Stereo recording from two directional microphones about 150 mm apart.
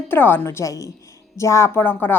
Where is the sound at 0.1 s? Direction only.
15° left (ahead or behind).